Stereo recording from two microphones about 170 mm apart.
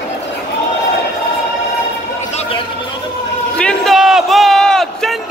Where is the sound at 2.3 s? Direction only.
35° left (ahead or behind).